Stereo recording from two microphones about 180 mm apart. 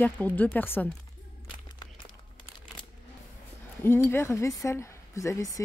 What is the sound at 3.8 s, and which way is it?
Speech, 15° left (ahead or behind).